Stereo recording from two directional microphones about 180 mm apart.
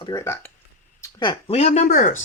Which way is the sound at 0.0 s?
20° left (ahead or behind).